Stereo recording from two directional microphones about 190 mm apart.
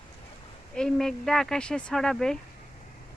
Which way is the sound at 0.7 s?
5° left (ahead or behind).